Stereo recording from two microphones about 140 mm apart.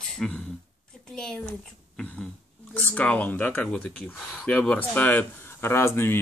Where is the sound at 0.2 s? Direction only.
Centre (ahead or behind).